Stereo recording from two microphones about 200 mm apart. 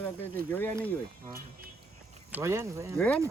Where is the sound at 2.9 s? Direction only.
10° left (ahead or behind).